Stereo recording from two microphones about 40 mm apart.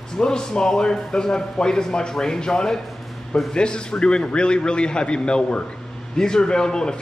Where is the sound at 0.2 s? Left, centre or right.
Centre.